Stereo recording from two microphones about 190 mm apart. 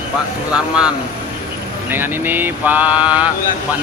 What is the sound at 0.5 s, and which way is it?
Speech, 5° right (ahead or behind).